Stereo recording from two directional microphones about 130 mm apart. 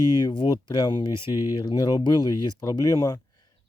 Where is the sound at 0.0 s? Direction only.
30° left (ahead or behind).